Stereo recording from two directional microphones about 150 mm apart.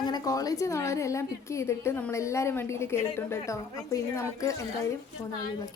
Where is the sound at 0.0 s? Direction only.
25° left (ahead or behind).